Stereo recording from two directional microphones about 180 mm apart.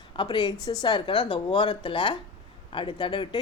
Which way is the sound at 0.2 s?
25° left (ahead or behind).